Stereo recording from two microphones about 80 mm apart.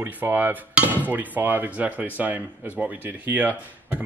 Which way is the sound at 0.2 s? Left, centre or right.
Right.